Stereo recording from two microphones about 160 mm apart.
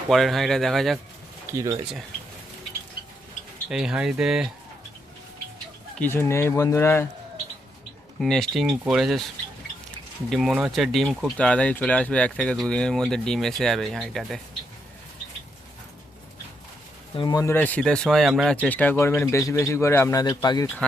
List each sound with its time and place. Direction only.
0.1 s speech: centre (ahead or behind)
3.7 s speech: 5° right (ahead or behind)
6.0 s a man's voice: 15° left (ahead or behind)
8.2 s speech: centre (ahead or behind)
17.2 s a man's voice: 25° left (ahead or behind)